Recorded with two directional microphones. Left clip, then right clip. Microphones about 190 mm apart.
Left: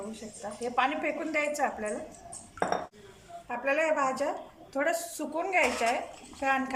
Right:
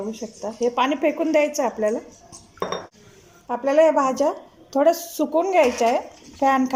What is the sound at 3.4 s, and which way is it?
Speech, 35° right (ahead or behind).